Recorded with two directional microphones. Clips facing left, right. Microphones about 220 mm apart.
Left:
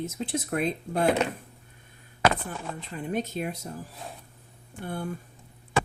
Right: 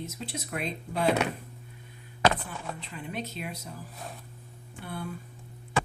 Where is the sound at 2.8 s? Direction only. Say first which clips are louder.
Left 6 dB; 45° left (ahead or behind).